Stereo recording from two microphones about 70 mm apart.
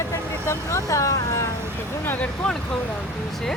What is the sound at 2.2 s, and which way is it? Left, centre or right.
Vehicle, centre.